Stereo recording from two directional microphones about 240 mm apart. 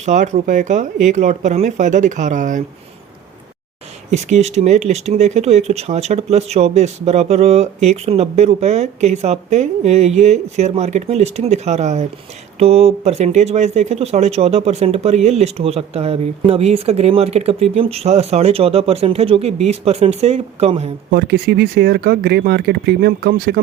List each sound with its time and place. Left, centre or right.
0.0 s speech: right
4.1 s speech: right
21.1 s speech: right